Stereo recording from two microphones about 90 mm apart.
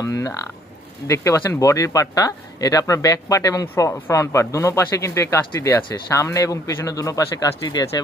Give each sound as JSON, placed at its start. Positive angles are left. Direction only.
{"t": 0.0, "sound": "speech", "side_deg": 35}